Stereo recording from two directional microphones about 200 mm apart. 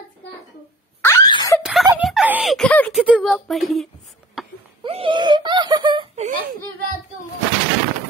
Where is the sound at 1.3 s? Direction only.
25° left (ahead or behind).